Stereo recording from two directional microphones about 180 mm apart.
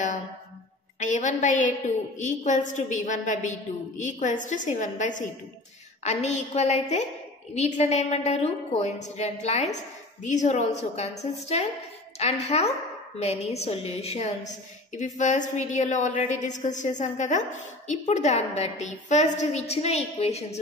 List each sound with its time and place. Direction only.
0.9 s a woman's voice: 45° left (ahead or behind)